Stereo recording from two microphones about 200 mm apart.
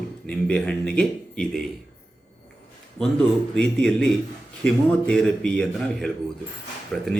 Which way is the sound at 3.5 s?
5° left (ahead or behind).